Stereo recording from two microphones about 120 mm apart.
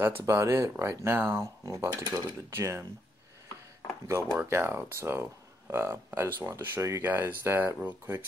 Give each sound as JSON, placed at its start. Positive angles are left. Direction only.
{"t": 0.0, "sound": "speech", "side_deg": -20}
{"t": 4.4, "sound": "speech", "side_deg": -20}